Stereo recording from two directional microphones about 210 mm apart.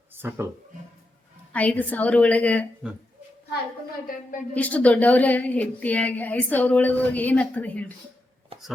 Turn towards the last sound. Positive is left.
turn(degrees=5)  # may be behind; listen again after turning